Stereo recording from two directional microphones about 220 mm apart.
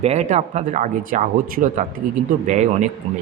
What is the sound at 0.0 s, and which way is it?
A man's voice, 30° right (ahead or behind).